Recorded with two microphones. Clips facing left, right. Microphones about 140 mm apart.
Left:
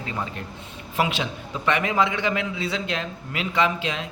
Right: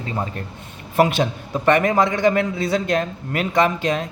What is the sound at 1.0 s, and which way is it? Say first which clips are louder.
A man's voice: right 7 dB; 50° right (ahead or behind).